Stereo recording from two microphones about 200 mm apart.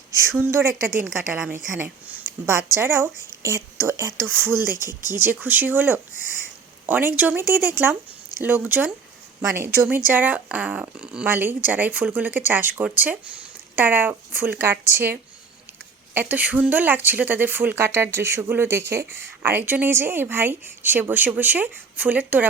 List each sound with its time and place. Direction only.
0.1 s a woman's voice: 15° right (ahead or behind)
4.9 s speech: 20° left (ahead or behind)
5.1 s a woman's voice: 10° right (ahead or behind)